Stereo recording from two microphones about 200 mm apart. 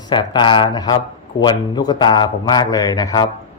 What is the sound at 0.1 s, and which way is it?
A man's voice, 20° left (ahead or behind).